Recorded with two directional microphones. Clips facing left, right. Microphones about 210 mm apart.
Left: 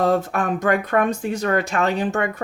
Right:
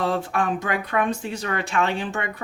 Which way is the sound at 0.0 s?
45° left (ahead or behind).